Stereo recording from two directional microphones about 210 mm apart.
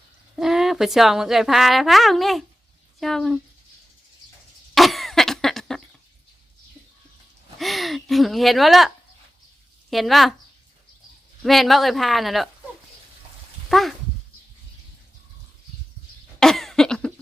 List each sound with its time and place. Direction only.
0.3 s speech: centre (ahead or behind)
4.7 s cough: centre (ahead or behind)
7.6 s speech: centre (ahead or behind)
9.9 s speech: centre (ahead or behind)
11.4 s speech: centre (ahead or behind)
13.7 s dog: centre (ahead or behind)
16.4 s cough: centre (ahead or behind)